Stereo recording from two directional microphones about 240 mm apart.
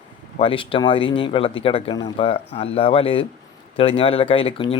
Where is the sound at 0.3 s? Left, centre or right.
Left.